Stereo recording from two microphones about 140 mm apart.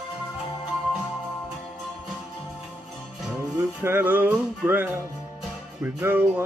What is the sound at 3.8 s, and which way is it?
Music, 15° right (ahead or behind).